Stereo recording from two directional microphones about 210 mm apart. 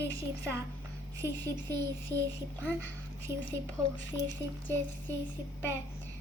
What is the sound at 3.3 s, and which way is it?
Speech, 10° right (ahead or behind).